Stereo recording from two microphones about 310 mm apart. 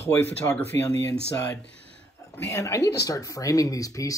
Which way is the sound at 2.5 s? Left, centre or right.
Centre.